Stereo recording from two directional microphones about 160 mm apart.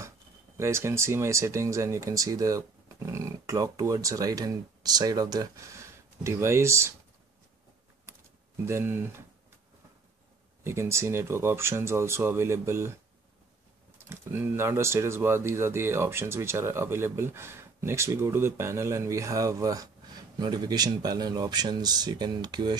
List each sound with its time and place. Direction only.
0.6 s speech: 15° right (ahead or behind)
8.6 s speech: 15° right (ahead or behind)
10.6 s speech: 15° right (ahead or behind)
14.0 s speech: 15° right (ahead or behind)